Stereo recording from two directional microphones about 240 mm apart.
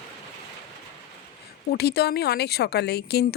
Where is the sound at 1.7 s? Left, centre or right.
Left.